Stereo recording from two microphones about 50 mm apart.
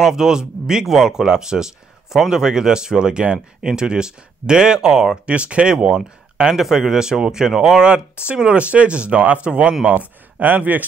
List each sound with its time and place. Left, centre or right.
0.0 s speech: centre
5.2 s speech: right
9.8 s speech: right